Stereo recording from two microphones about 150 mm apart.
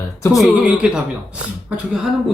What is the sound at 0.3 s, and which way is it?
Speech, 5° right (ahead or behind).